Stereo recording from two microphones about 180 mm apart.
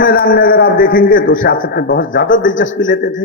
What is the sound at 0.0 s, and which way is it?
A man's voice, 55° left (ahead or behind).